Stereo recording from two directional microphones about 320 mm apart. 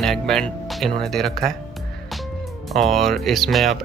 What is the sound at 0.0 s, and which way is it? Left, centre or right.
Speech, centre.